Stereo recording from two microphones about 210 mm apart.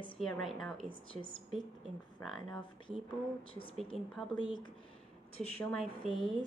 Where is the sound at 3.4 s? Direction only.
25° left (ahead or behind).